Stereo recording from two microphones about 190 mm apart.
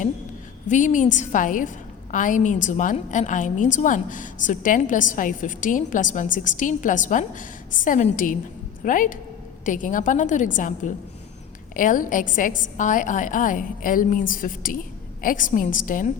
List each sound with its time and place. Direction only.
0.7 s a woman's voice: 40° left (ahead or behind)